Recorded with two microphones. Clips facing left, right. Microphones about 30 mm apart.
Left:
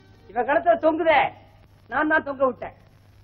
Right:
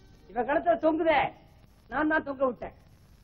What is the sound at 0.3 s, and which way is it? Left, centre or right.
Speech, left.